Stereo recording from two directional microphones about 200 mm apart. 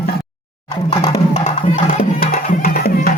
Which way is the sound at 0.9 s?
25° left (ahead or behind).